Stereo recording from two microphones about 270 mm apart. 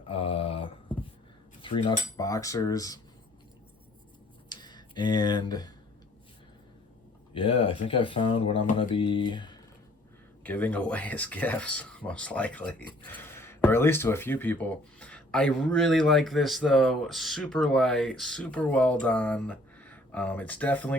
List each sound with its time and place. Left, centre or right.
0.1 s a sound: left
1.6 s cutlery: centre
4.4 s speech: centre
7.3 s speech: centre
10.4 s speech: centre